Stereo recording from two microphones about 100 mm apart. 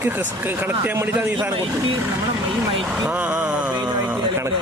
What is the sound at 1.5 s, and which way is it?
Speech, 60° right (ahead or behind).